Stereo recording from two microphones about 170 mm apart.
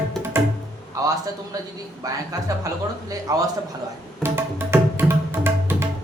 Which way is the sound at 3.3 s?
20° right (ahead or behind).